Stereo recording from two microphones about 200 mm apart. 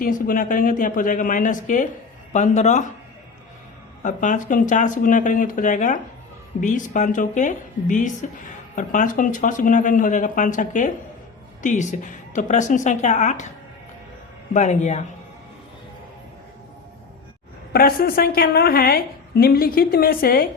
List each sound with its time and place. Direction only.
0.0 s a woman's voice: 45° left (ahead or behind)
4.0 s speech: 40° left (ahead or behind)
14.5 s speech: 35° left (ahead or behind)
17.7 s a woman's voice: 50° left (ahead or behind)